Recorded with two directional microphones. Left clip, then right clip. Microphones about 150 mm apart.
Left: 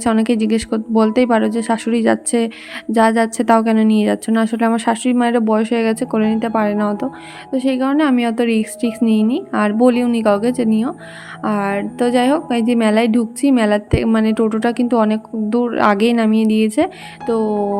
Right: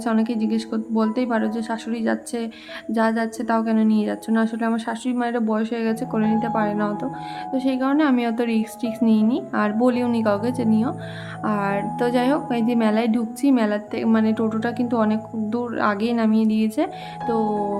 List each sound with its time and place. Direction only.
0.0 s a woman's voice: 50° left (ahead or behind)